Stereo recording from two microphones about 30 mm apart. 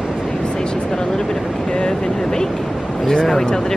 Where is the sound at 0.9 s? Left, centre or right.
Left.